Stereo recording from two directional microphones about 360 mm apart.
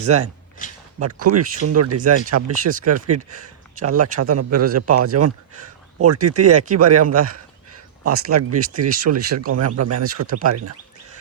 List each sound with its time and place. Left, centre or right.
0.0 s a man's voice: right
0.6 s a sound: left
0.9 s a man's voice: right